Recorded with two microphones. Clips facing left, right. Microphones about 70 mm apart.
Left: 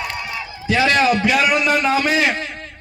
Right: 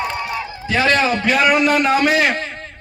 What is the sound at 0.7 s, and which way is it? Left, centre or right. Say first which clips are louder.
A man's voice: left 1 dB; right.